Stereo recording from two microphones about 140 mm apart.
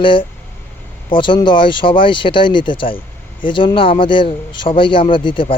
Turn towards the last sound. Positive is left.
turn(degrees=35)  # may be behind; listen again after turning